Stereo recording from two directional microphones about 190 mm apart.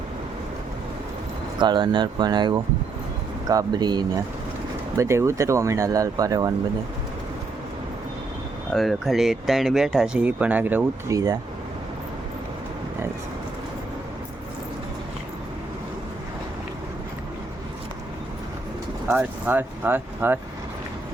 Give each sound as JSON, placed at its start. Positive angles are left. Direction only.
{"t": 1.5, "sound": "speech", "side_deg": -25}
{"t": 8.7, "sound": "speech", "side_deg": 0}
{"t": 19.0, "sound": "speech", "side_deg": -10}